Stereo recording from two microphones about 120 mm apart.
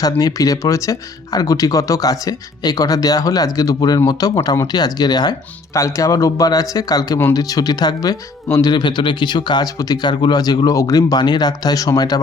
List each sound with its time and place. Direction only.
0.0 s speech: 30° left (ahead or behind)